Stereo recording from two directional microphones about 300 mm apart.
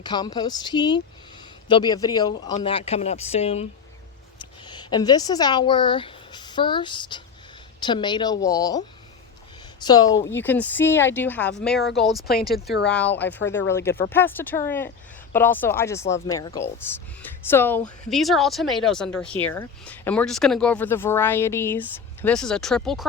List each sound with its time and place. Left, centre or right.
0.0 s speech: centre
9.8 s speech: centre